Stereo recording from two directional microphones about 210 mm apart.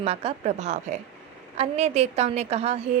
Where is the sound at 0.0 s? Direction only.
30° right (ahead or behind).